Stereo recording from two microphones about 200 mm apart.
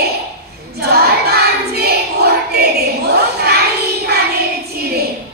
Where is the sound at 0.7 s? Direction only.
50° right (ahead or behind).